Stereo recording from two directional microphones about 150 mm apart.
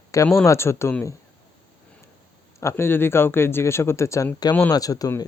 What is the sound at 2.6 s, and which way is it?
Speech, 15° left (ahead or behind).